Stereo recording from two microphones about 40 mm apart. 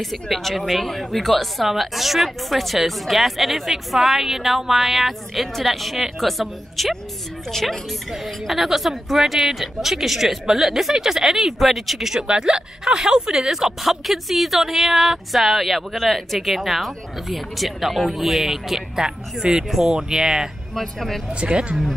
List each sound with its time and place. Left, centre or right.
0.0 s a woman's voice: centre
12.3 s a woman's voice: centre
20.7 s speech: centre
21.4 s speech: right